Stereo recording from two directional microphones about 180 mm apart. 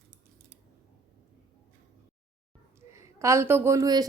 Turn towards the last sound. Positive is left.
turn(degrees=-20)  # may be behind; listen again after turning